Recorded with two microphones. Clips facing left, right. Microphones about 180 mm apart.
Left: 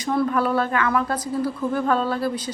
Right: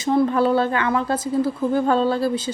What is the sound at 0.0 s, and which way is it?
A woman's voice, 25° right (ahead or behind).